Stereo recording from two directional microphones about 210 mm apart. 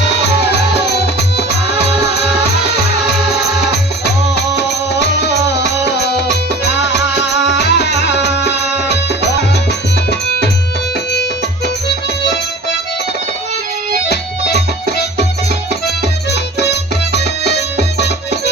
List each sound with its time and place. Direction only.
7.6 s music: 55° left (ahead or behind)
16.3 s music: 55° left (ahead or behind)